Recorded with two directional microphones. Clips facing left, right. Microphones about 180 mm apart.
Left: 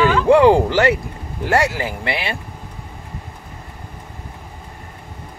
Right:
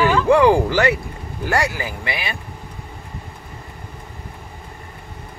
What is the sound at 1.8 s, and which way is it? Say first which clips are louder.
Speech: left 3 dB; 30° left (ahead or behind).